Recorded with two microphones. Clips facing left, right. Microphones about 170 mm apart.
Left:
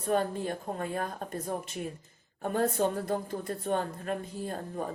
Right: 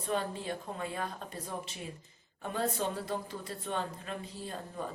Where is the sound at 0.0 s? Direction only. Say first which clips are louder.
Left 5 dB; 50° left (ahead or behind).